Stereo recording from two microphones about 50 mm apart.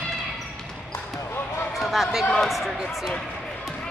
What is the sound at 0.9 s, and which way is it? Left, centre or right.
Basketball bounce, left.